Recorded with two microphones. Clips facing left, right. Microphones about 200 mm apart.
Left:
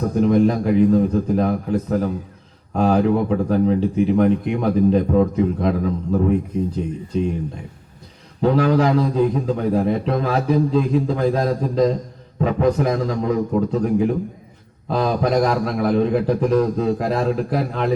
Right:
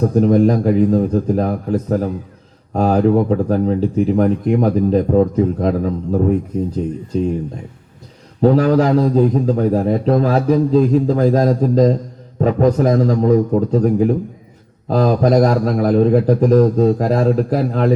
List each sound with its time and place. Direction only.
0.2 s a man's voice: 40° right (ahead or behind)
8.4 s a man's voice: 40° right (ahead or behind)